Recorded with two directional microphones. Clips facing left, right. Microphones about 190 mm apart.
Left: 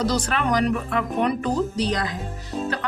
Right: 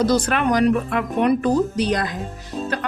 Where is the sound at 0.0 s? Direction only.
55° right (ahead or behind).